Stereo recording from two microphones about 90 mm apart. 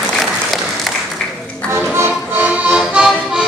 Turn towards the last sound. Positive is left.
turn(degrees=-10)  # may be behind; listen again after turning